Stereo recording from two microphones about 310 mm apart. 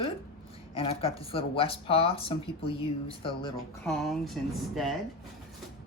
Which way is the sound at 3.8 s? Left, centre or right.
Centre.